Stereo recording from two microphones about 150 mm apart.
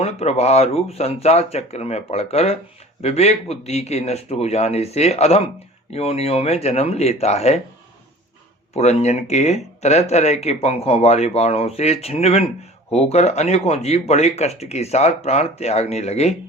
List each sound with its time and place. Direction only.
0.0 s speech: 45° left (ahead or behind)
8.7 s speech: 45° left (ahead or behind)